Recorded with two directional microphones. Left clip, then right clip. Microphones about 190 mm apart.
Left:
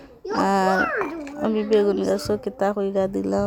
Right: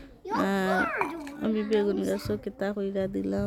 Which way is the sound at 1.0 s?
40° right (ahead or behind).